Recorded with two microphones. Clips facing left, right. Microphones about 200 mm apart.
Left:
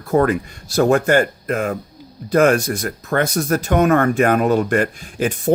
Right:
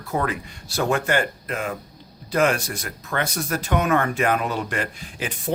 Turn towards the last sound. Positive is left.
turn(degrees=45)  # may be behind; listen again after turning